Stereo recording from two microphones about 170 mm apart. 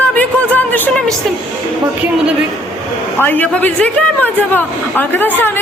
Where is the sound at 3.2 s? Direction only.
10° left (ahead or behind).